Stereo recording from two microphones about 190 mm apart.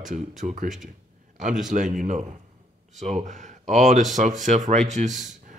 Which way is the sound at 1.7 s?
40° right (ahead or behind).